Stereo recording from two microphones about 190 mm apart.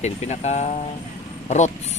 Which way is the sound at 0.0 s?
35° left (ahead or behind).